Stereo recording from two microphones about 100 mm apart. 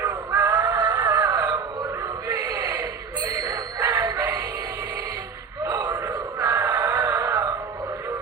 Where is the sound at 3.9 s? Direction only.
35° right (ahead or behind).